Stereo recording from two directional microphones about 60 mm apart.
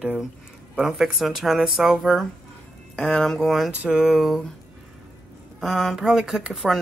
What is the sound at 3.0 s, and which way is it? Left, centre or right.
Speech, centre.